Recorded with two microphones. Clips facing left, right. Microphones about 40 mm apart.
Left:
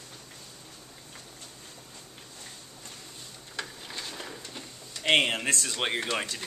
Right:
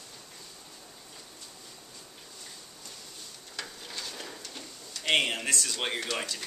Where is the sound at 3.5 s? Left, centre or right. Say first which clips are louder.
Left 2 dB; centre.